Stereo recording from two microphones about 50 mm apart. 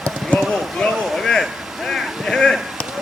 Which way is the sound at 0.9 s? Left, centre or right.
Centre.